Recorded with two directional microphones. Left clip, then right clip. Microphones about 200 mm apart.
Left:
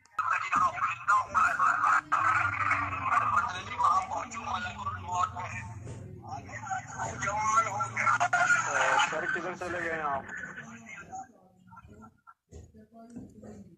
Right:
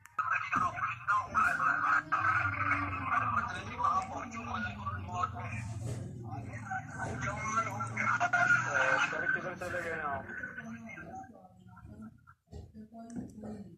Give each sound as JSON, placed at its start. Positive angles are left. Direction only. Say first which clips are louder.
{"t": 0.2, "sound": "music", "louder": "left 4 dB", "side_deg": 40}
{"t": 6.3, "sound": "vehicle", "louder": "left 4 dB", "side_deg": 35}
{"t": 7.5, "sound": "a sound", "louder": "left 6 dB", "side_deg": 35}